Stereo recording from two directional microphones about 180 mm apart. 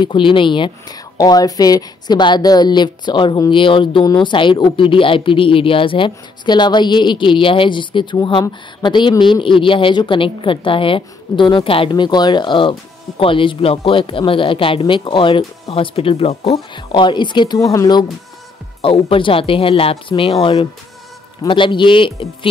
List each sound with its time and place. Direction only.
0.0 s a woman's voice: 30° left (ahead or behind)